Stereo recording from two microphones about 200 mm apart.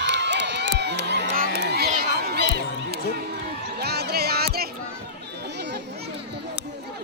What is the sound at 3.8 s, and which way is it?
Music, 55° right (ahead or behind).